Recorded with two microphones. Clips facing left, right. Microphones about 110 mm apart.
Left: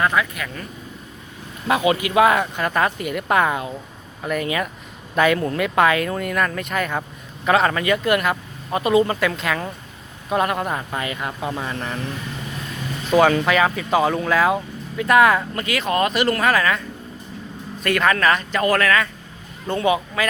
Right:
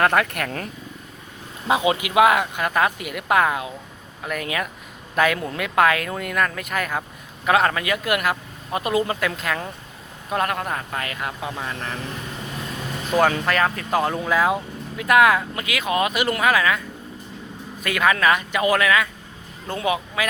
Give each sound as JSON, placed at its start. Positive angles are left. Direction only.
{"t": 0.0, "sound": "speech", "side_deg": -60}
{"t": 1.6, "sound": "speech", "side_deg": -20}
{"t": 13.1, "sound": "a man's voice", "side_deg": 0}